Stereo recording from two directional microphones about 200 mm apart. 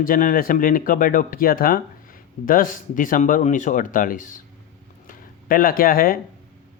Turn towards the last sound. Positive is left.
turn(degrees=45)  # may be behind; listen again after turning